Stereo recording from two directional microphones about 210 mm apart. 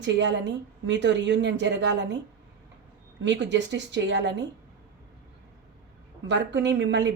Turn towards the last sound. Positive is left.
turn(degrees=-55)  # may be behind; listen again after turning